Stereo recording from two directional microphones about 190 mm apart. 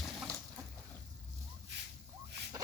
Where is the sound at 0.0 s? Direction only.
Centre (ahead or behind).